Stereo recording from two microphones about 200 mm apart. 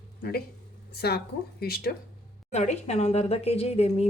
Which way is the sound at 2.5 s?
35° left (ahead or behind).